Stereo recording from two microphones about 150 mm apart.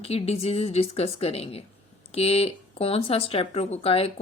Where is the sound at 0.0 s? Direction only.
40° left (ahead or behind).